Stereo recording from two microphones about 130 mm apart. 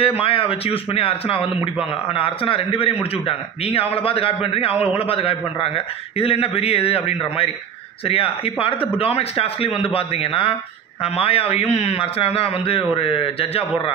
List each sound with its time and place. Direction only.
0.0 s a man's voice: 45° left (ahead or behind)